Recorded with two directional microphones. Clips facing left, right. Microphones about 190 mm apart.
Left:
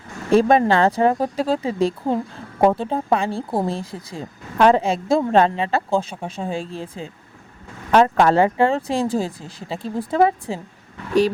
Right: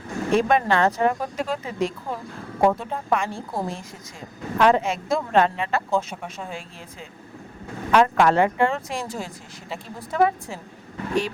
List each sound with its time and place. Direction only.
0.3 s speech: 35° left (ahead or behind)